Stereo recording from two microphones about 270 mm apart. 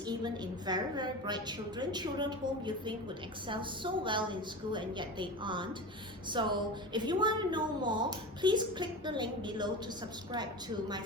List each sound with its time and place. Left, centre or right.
0.0 s a woman's voice: centre
3.4 s a woman's voice: centre